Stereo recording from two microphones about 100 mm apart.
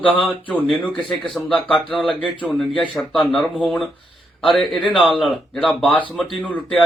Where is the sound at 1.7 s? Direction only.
55° left (ahead or behind).